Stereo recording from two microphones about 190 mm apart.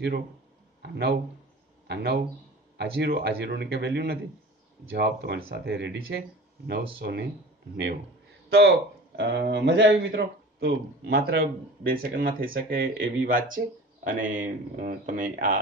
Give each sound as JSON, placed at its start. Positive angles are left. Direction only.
{"t": 0.8, "sound": "a man's voice", "side_deg": -60}
{"t": 8.5, "sound": "speech", "side_deg": -65}